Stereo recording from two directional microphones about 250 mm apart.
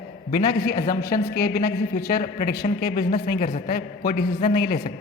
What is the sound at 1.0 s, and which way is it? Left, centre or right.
A man's voice, left.